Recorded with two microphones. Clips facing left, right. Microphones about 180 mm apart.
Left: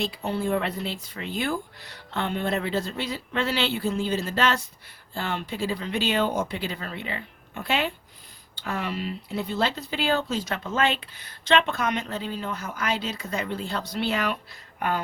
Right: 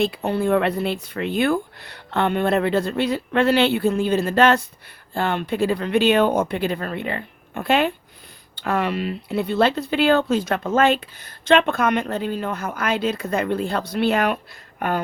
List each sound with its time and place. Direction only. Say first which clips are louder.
0.0 s speech: right 7 dB; 60° right (ahead or behind)
8.5 s speech: right 8 dB; 65° right (ahead or behind)